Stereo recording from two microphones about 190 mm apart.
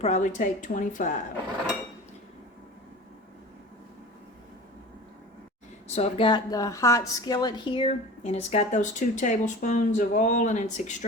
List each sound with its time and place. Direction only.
0.0 s a woman's voice: 40° left (ahead or behind)
5.9 s a woman's voice: 30° left (ahead or behind)